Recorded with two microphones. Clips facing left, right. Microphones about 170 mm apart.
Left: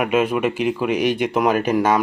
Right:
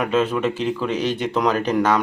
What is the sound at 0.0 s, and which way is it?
Speech, 15° left (ahead or behind).